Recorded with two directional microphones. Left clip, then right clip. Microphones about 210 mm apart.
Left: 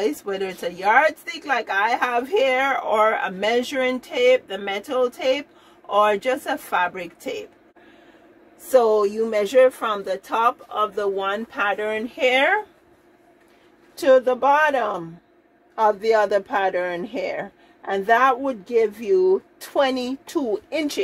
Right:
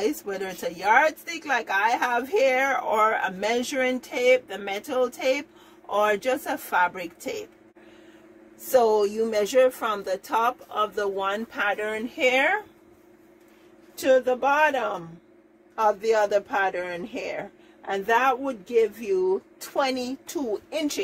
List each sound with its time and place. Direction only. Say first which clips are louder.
0.0 s speech: left 4 dB; 20° left (ahead or behind)
8.7 s speech: left 3 dB; 10° left (ahead or behind); by 12.5 s 25° left (ahead or behind)
14.0 s speech: left 5 dB; 30° left (ahead or behind)